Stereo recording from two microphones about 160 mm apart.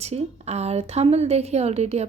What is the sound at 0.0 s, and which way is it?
Speech, 40° right (ahead or behind).